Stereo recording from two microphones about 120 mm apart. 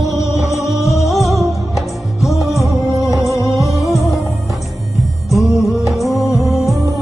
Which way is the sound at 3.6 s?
Centre (ahead or behind).